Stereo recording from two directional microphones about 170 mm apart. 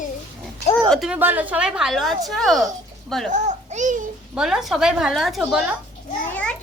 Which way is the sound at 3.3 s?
45° right (ahead or behind).